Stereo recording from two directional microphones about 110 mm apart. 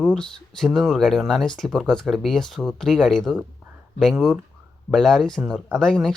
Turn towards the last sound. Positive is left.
turn(degrees=5)  # may be behind; listen again after turning